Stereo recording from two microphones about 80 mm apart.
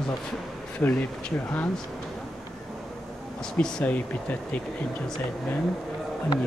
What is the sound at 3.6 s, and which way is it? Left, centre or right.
Speech, left.